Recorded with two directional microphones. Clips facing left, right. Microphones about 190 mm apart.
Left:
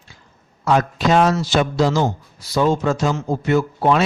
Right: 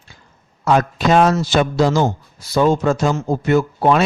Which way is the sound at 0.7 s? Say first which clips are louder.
Right 2 dB; 50° right (ahead or behind).